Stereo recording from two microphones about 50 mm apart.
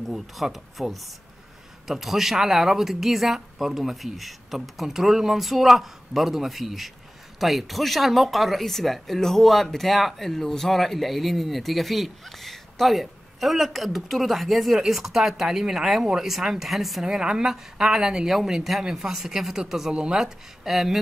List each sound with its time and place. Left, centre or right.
0.0 s speech: centre
17.0 s a woman's voice: centre
19.9 s speech: centre
20.2 s a woman's voice: centre